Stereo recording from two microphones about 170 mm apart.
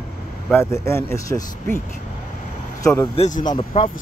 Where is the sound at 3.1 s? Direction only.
40° left (ahead or behind).